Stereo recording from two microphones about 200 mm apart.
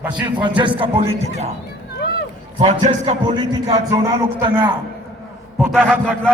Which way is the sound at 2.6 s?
30° right (ahead or behind).